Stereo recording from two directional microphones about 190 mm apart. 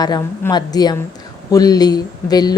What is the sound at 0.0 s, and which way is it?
A woman's voice, 20° left (ahead or behind).